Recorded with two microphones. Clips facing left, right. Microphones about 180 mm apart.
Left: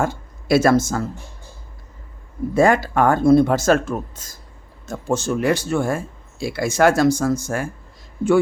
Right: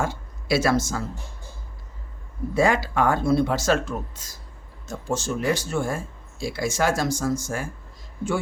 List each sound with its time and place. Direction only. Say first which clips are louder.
0.0 s speech: left 5 dB; 50° left (ahead or behind)
2.6 s speech: left 5 dB; 50° left (ahead or behind)
4.9 s speech: left 5 dB; 60° left (ahead or behind)